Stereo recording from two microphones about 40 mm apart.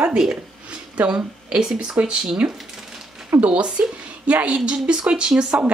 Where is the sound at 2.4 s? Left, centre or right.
Right.